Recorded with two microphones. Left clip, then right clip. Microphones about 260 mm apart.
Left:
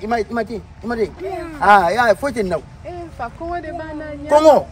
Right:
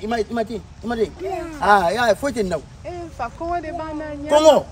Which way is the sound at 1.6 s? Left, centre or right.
Centre.